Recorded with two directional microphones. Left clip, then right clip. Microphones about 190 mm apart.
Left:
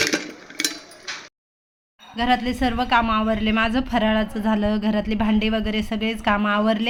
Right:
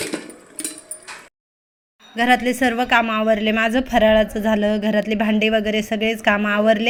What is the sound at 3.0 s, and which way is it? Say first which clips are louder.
A woman's voice: right 3 dB; 5° right (ahead or behind).